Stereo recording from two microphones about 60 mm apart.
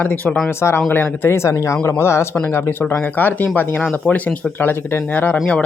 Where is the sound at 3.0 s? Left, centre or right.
Left.